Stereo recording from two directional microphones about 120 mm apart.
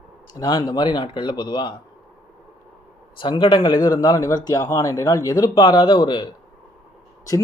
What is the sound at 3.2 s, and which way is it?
Speech, 45° left (ahead or behind).